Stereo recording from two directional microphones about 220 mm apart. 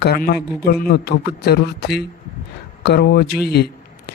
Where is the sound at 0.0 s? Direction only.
45° left (ahead or behind).